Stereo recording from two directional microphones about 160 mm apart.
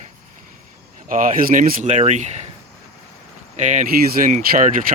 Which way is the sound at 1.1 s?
55° right (ahead or behind).